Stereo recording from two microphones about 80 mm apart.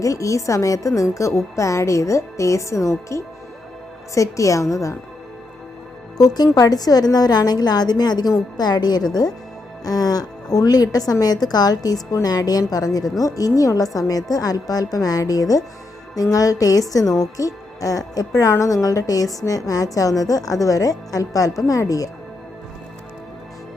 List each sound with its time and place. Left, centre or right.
0.0 s a woman's voice: left
6.1 s a woman's voice: left